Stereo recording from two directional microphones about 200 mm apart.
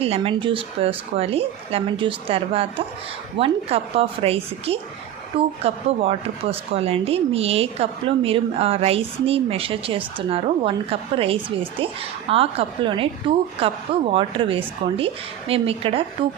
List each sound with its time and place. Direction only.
0.0 s speech: 30° right (ahead or behind)
14.1 s speech: 25° right (ahead or behind)